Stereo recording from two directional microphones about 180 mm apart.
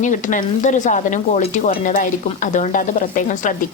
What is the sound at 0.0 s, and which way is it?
Speech, 45° left (ahead or behind).